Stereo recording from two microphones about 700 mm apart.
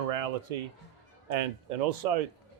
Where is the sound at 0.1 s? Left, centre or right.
Right.